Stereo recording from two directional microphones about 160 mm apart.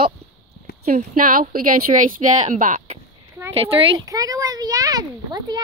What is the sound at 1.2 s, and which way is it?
Speech, 60° right (ahead or behind).